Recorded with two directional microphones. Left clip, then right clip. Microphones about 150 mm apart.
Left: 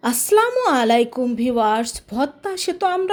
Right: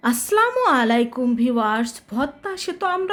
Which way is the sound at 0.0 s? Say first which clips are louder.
Left 2 dB; 15° left (ahead or behind).